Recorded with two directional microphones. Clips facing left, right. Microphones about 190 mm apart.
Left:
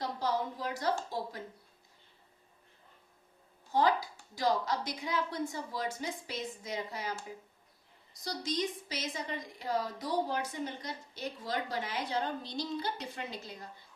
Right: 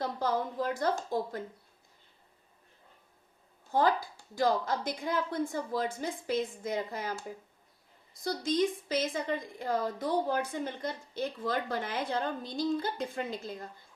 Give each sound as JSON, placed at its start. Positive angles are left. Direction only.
{"t": 0.0, "sound": "a woman's voice", "side_deg": -50}
{"t": 3.7, "sound": "a woman's voice", "side_deg": -50}
{"t": 8.1, "sound": "a woman's voice", "side_deg": -50}